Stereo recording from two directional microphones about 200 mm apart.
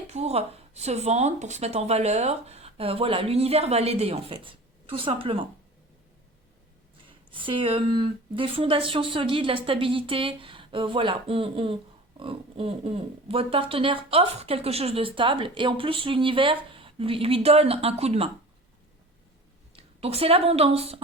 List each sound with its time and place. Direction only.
0.1 s speech: 30° right (ahead or behind)
7.3 s speech: 25° right (ahead or behind)
19.7 s speech: 30° right (ahead or behind)